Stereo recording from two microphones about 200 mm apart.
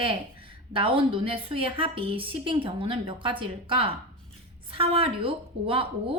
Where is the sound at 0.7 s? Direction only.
25° right (ahead or behind).